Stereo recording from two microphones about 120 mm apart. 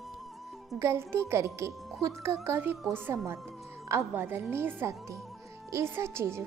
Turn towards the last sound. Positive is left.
turn(degrees=-20)  # may be behind; listen again after turning